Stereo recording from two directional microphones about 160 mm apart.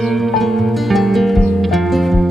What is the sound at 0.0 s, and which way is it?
Music, centre (ahead or behind).